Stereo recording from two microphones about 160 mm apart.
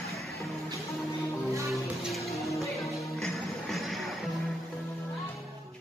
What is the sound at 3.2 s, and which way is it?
Music, centre (ahead or behind).